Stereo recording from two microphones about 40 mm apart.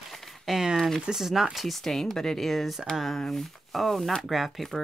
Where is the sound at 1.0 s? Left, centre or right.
Centre.